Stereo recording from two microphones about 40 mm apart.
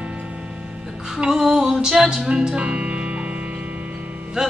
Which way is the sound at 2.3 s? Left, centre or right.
Right.